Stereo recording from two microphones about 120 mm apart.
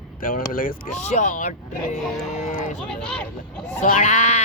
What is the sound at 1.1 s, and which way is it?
Speech, 90° left.